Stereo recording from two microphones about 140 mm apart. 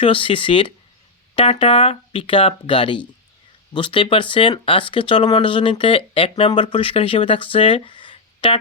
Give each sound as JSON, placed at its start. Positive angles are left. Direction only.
{"t": 0.0, "sound": "speech", "side_deg": 40}